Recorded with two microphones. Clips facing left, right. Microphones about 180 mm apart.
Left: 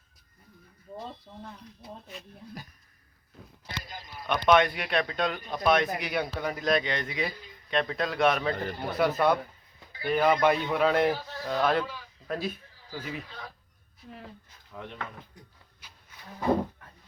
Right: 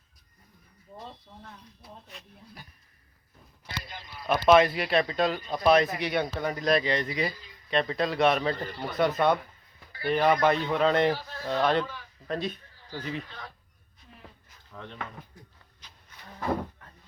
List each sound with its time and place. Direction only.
3.8 s speech: 40° left (ahead or behind)
4.3 s a man's voice: 5° right (ahead or behind)
14.7 s speech: 15° left (ahead or behind)
15.8 s a sound: 10° left (ahead or behind)